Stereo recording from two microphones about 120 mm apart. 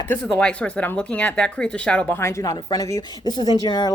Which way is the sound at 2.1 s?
25° left (ahead or behind).